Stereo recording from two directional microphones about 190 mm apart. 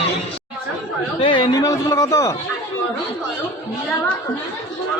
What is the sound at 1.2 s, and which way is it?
A man's voice, 25° left (ahead or behind).